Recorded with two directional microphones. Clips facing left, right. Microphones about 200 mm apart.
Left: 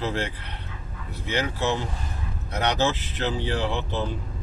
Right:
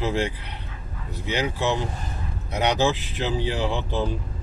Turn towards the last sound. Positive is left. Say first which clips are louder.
# right 2 dB
turn(degrees=-15)  # may be behind; listen again after turning